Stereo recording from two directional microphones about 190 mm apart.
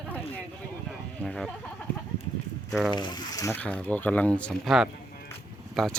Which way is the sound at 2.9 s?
20° left (ahead or behind).